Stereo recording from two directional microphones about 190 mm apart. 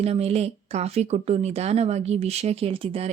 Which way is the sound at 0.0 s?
35° right (ahead or behind).